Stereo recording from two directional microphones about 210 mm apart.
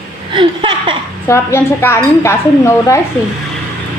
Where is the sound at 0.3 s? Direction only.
25° right (ahead or behind).